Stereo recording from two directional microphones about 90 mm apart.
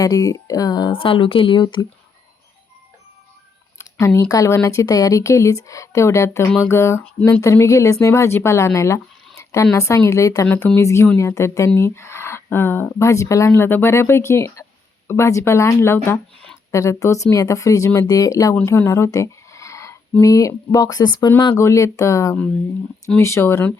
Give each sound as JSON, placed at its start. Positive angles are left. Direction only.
{"t": 0.0, "sound": "speech", "side_deg": 40}
{"t": 0.9, "sound": "speech", "side_deg": 75}
{"t": 1.6, "sound": "speech", "side_deg": 55}
{"t": 3.8, "sound": "speech", "side_deg": 35}
{"t": 10.4, "sound": "speech", "side_deg": 20}
{"t": 13.5, "sound": "speech", "side_deg": 20}
{"t": 18.9, "sound": "a sound", "side_deg": 35}
{"t": 20.2, "sound": "speech", "side_deg": 40}
{"t": 21.5, "sound": "speech", "side_deg": 35}